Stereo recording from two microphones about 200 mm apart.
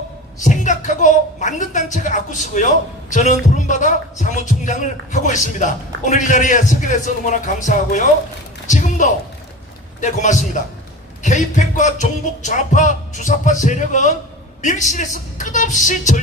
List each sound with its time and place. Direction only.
0.4 s a man's voice: 40° left (ahead or behind)